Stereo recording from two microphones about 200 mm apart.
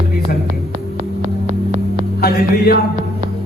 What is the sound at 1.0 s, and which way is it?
Hum, 40° right (ahead or behind).